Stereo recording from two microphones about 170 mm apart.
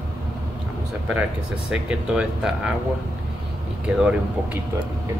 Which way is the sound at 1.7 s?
5° right (ahead or behind).